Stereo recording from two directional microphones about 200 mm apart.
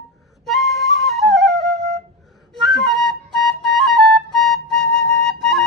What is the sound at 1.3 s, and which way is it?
Flute, 55° right (ahead or behind).